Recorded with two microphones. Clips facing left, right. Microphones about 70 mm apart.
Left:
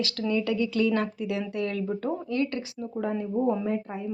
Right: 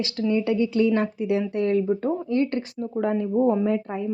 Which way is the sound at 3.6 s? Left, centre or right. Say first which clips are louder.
Right 5 dB; right.